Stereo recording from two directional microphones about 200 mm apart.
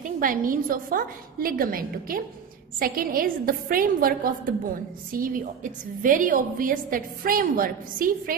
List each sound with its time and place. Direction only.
0.0 s a woman's voice: 45° right (ahead or behind)